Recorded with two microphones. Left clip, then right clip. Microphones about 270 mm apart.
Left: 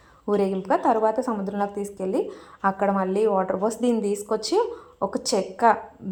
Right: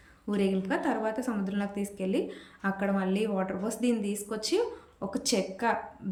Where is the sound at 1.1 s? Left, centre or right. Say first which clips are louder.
Left 8 dB; centre.